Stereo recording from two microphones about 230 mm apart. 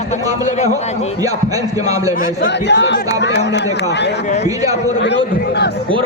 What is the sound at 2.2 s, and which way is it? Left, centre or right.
Speech, left.